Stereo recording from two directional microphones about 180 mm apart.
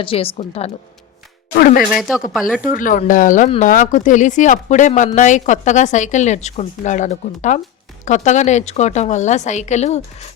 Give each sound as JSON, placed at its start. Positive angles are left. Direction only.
{"t": 0.0, "sound": "a woman's voice", "side_deg": 30}
{"t": 1.5, "sound": "a woman's voice", "side_deg": 55}
{"t": 1.8, "sound": "speech", "side_deg": 0}
{"t": 2.6, "sound": "a woman's voice", "side_deg": 50}